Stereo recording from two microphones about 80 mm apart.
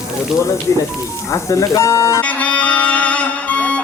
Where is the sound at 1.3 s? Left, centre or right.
Left.